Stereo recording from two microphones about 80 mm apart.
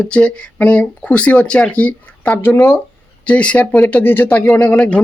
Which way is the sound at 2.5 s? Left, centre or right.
Left.